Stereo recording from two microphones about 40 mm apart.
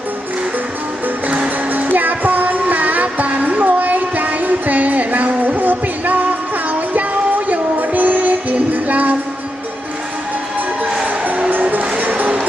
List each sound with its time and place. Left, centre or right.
1.9 s music: right
10.8 s music: right
11.5 s music: right